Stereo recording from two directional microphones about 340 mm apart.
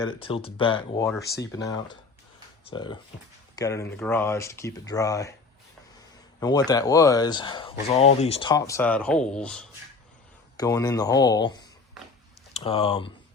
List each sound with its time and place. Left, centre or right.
0.0 s speech: centre
6.4 s speech: centre
12.5 s speech: centre